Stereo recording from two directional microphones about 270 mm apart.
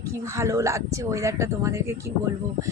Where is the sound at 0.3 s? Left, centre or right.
Centre.